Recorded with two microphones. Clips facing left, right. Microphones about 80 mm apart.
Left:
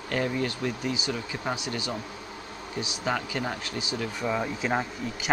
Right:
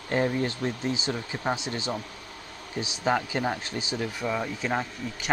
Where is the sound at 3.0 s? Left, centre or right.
Right.